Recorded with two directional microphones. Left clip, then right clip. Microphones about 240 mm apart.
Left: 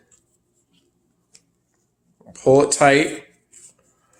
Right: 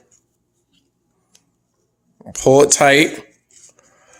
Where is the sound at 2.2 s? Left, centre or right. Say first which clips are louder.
Right 4 dB; right.